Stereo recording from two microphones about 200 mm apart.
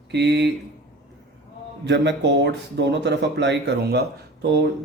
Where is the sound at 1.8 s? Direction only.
60° right (ahead or behind).